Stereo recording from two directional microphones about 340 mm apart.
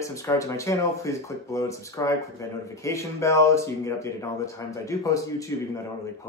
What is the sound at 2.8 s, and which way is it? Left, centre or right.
Speech, centre.